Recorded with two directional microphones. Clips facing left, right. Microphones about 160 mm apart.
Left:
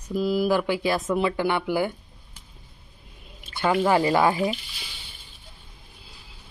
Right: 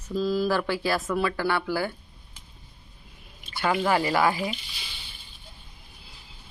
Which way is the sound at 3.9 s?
20° left (ahead or behind).